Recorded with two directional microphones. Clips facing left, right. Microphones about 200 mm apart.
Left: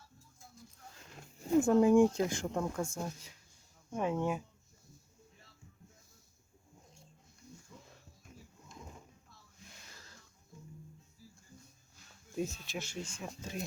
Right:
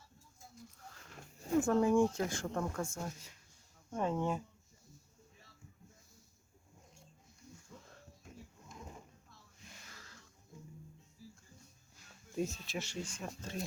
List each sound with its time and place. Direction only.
1.5 s speech: 15° left (ahead or behind)
12.4 s speech: centre (ahead or behind)